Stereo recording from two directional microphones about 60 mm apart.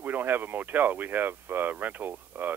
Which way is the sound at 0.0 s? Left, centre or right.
Right.